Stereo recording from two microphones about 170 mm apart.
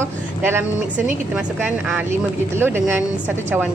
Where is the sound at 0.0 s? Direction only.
15° right (ahead or behind).